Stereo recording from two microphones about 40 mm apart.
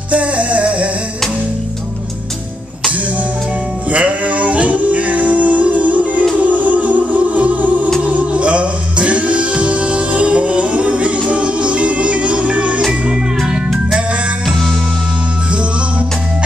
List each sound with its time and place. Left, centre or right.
0.1 s music: right
3.9 s music: right
13.5 s music: centre